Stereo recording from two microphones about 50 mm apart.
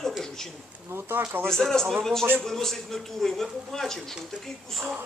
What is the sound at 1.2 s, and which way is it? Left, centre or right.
Speech, right.